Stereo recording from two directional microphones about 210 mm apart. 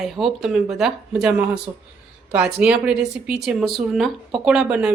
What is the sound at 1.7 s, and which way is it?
Speech, 15° right (ahead or behind).